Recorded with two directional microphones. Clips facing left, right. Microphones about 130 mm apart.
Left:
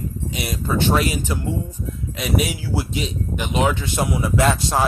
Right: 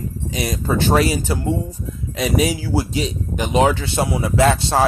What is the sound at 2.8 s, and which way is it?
Speech, 40° right (ahead or behind).